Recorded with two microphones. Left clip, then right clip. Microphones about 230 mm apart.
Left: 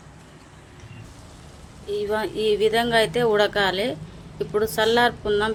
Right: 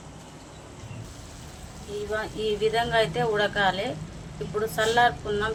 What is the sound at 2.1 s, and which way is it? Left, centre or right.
A woman's voice, left.